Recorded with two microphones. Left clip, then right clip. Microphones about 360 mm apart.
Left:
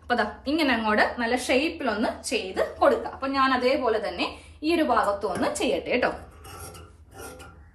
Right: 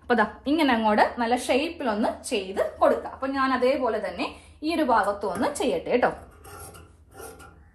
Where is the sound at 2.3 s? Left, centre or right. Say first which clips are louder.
Even; centre.